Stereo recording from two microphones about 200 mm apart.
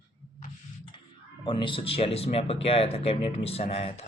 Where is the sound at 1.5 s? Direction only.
25° left (ahead or behind).